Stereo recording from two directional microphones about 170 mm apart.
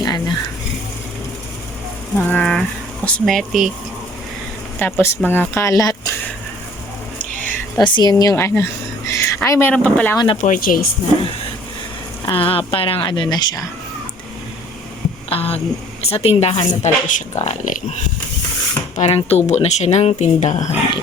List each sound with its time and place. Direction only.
0.0 s a sound: 25° left (ahead or behind)
2.1 s speech: 5° left (ahead or behind)
4.8 s speech: 15° left (ahead or behind)
7.2 s a sound: 10° left (ahead or behind)
7.8 s a woman's voice: 25° left (ahead or behind); by 10.2 s 10° left (ahead or behind)
10.4 s speech: 55° left (ahead or behind)
12.2 s a woman's voice: 30° left (ahead or behind)
15.3 s a woman's voice: 35° left (ahead or behind)
18.9 s speech: 40° left (ahead or behind)